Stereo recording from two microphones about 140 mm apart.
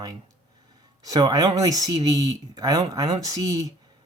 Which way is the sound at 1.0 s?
25° right (ahead or behind).